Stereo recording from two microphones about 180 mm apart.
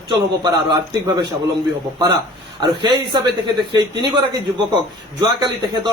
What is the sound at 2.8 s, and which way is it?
A man's voice, 25° right (ahead or behind).